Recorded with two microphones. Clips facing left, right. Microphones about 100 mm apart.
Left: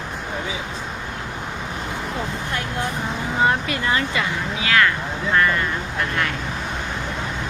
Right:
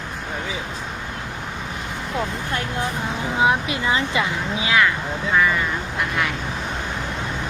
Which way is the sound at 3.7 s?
20° right (ahead or behind).